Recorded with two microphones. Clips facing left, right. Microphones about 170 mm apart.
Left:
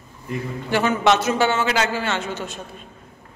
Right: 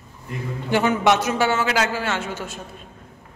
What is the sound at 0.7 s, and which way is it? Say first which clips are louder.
A man's voice: even; 15° right (ahead or behind).